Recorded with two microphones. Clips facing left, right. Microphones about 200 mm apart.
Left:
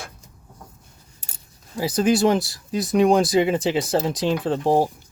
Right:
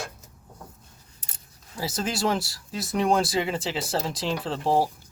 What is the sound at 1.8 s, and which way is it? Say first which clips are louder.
Speech: left 9 dB; 15° left (ahead or behind).